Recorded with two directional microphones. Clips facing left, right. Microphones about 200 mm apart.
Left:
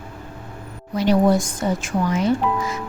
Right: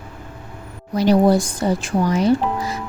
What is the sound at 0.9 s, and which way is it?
Speech, 35° right (ahead or behind).